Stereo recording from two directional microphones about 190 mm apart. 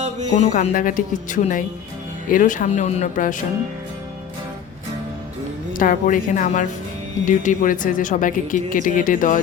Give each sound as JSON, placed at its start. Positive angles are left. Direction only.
{"t": 0.3, "sound": "speech", "side_deg": 40}
{"t": 5.7, "sound": "speech", "side_deg": 45}